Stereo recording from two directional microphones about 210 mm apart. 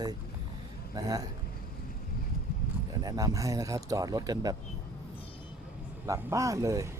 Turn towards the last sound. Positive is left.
turn(degrees=-15)  # may be behind; listen again after turning